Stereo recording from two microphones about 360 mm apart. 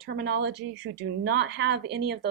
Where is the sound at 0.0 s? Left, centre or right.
Right.